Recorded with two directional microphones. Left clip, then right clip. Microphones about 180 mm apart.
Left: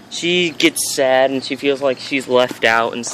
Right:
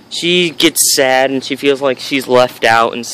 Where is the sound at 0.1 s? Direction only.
35° right (ahead or behind).